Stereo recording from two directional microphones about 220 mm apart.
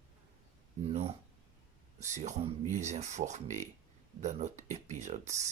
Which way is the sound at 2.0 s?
35° right (ahead or behind).